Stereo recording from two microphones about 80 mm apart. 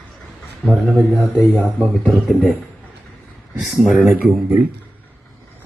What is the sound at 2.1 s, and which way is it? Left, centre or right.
Speech, centre.